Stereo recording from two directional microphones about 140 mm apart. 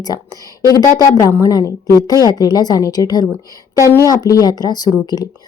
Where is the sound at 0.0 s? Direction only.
25° left (ahead or behind).